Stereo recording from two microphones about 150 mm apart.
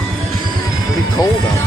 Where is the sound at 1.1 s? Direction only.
25° left (ahead or behind).